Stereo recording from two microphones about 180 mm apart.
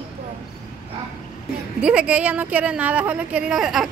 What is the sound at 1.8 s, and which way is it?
Speech, 5° right (ahead or behind).